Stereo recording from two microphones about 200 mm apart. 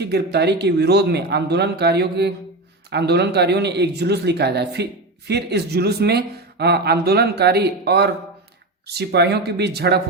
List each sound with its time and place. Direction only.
0.0 s speech: 55° right (ahead or behind)